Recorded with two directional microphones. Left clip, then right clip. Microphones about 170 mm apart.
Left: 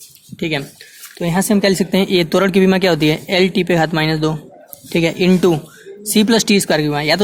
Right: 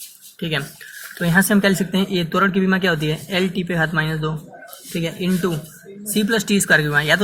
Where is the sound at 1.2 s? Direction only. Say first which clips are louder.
Even; 25° left (ahead or behind).